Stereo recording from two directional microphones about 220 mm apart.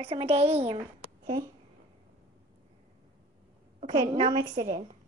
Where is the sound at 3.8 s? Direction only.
25° right (ahead or behind).